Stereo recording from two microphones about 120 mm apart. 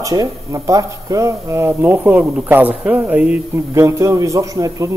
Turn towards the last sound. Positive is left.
turn(degrees=-30)  # may be behind; listen again after turning